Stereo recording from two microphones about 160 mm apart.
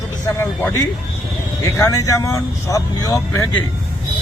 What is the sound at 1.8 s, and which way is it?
Speech, 20° left (ahead or behind).